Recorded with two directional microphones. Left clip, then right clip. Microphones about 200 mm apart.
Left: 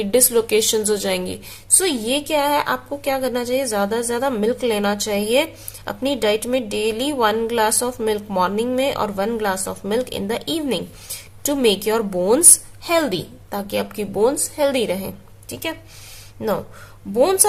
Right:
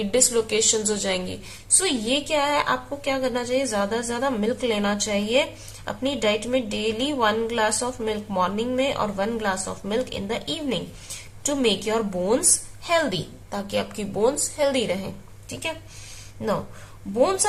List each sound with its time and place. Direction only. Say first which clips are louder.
0.0 s a woman's voice: left 4 dB; 35° left (ahead or behind)